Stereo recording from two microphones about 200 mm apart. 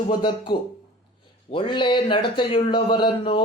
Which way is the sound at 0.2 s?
25° left (ahead or behind).